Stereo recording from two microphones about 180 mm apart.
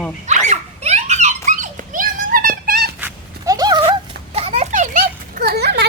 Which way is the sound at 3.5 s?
20° right (ahead or behind).